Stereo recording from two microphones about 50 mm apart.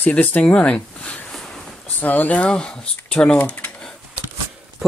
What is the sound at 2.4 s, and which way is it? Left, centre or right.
Speech, centre.